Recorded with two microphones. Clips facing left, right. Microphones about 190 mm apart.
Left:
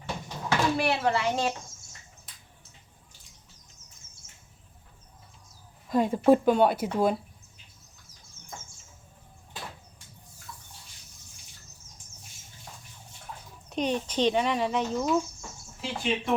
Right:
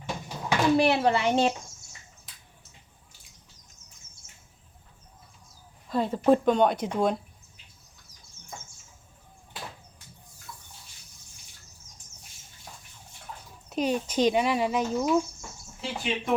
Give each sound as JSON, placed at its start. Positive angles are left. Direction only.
{"t": 0.0, "sound": "a sound", "side_deg": -15}
{"t": 2.3, "sound": "finger snapping", "side_deg": 0}
{"t": 5.9, "sound": "speech", "side_deg": 10}
{"t": 13.7, "sound": "speech", "side_deg": -5}